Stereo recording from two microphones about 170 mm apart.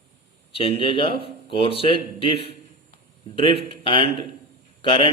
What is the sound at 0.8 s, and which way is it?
Speech, 30° left (ahead or behind).